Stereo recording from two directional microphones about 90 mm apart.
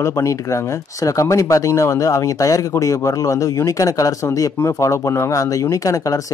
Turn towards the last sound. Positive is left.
turn(degrees=40)  # may be behind; listen again after turning